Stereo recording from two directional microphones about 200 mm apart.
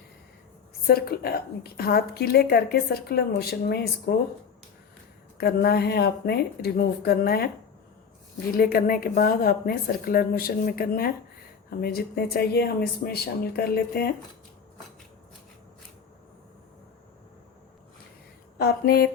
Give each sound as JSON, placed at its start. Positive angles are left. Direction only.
{"t": 0.9, "sound": "a woman's voice", "side_deg": 50}
{"t": 5.4, "sound": "a woman's voice", "side_deg": 50}
{"t": 8.5, "sound": "a woman's voice", "side_deg": 45}
{"t": 18.6, "sound": "a woman's voice", "side_deg": 50}